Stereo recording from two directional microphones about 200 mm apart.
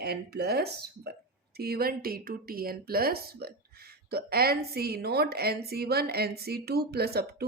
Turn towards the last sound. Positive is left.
turn(degrees=-50)  # may be behind; listen again after turning